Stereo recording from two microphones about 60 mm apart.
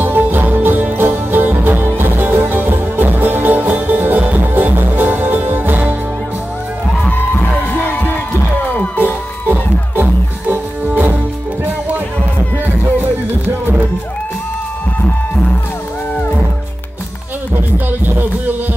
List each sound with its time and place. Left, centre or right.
0.0 s music: right
7.1 s music: left
9.0 s music: right